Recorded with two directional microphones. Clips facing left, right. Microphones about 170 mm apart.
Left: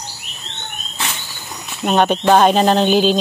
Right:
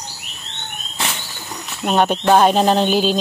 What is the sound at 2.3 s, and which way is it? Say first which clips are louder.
Music: left 1 dB; 5° right (ahead or behind).